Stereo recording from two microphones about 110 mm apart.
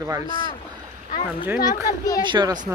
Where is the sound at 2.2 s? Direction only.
40° right (ahead or behind).